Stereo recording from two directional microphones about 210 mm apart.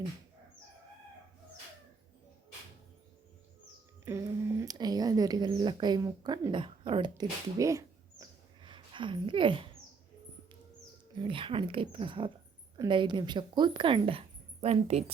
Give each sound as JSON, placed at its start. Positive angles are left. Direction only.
{"t": 4.0, "sound": "speech", "side_deg": -15}
{"t": 11.2, "sound": "speech", "side_deg": -25}